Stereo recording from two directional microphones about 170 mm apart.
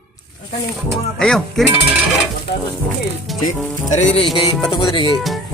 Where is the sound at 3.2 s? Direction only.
Centre (ahead or behind).